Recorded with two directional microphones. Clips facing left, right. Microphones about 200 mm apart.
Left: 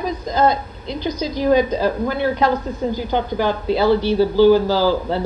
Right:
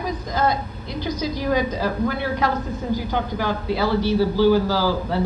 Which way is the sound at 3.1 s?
25° left (ahead or behind).